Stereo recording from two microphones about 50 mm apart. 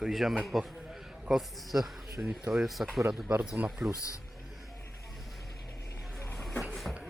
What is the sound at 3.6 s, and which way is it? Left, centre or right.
Speech, right.